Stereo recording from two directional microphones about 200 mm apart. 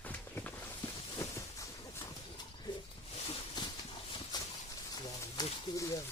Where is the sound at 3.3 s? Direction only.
25° left (ahead or behind).